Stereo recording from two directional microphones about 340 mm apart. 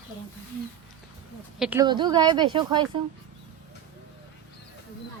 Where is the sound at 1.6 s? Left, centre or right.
Centre.